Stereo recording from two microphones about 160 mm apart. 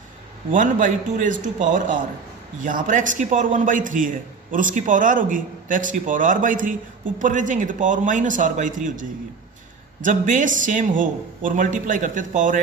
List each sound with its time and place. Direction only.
0.5 s a man's voice: 55° right (ahead or behind)